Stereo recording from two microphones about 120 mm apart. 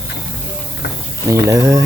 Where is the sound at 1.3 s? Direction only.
25° right (ahead or behind).